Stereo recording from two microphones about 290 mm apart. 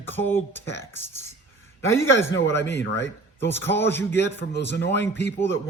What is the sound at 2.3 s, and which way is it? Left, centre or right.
Speech, left.